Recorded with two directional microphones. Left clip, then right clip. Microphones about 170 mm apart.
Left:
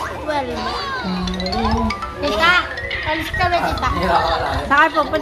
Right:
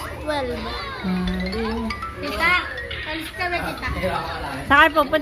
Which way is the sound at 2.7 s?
25° left (ahead or behind).